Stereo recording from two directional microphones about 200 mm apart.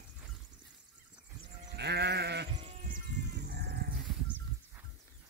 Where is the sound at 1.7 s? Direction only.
55° right (ahead or behind).